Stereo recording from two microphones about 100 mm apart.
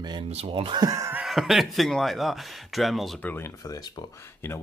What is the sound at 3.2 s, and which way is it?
Speech, 20° left (ahead or behind).